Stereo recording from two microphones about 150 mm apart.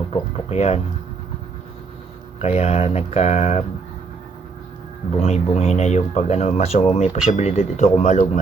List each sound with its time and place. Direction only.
0.1 s a sound: 45° left (ahead or behind)
2.4 s speech: 45° left (ahead or behind)
5.1 s speech: 45° left (ahead or behind)